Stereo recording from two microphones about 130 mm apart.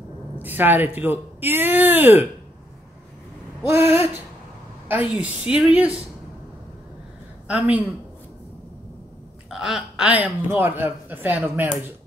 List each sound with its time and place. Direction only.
0.4 s speech: 15° right (ahead or behind)
3.7 s speech: 20° right (ahead or behind)
7.4 s speech: 10° right (ahead or behind)
9.5 s speech: 5° right (ahead or behind)